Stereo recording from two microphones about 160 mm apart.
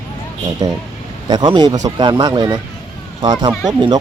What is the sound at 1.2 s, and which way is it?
Speech, 30° right (ahead or behind).